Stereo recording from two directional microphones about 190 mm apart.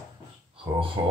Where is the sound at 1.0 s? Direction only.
25° right (ahead or behind).